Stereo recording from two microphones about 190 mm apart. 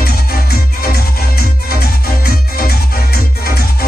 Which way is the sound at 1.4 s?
55° left (ahead or behind).